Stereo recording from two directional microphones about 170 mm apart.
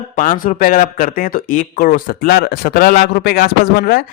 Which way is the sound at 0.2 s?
50° left (ahead or behind).